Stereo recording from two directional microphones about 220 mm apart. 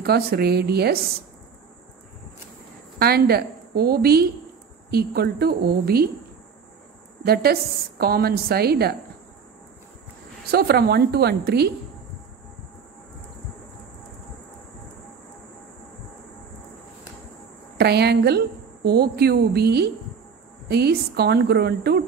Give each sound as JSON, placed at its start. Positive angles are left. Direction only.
{"t": 0.0, "sound": "a woman's voice", "side_deg": -45}
{"t": 3.0, "sound": "a woman's voice", "side_deg": -45}
{"t": 8.0, "sound": "a woman's voice", "side_deg": -45}
{"t": 10.5, "sound": "a woman's voice", "side_deg": -45}
{"t": 17.7, "sound": "a woman's voice", "side_deg": -45}